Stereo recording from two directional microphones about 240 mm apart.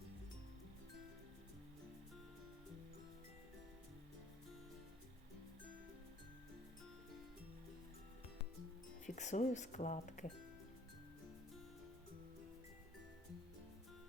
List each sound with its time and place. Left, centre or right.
9.0 s speech: left